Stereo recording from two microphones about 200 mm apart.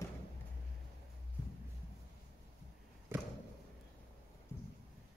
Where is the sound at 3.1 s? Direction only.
10° right (ahead or behind).